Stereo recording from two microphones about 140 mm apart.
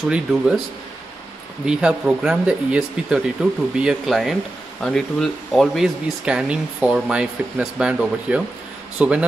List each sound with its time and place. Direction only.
0.1 s speech: 5° right (ahead or behind)
1.7 s speech: 5° right (ahead or behind)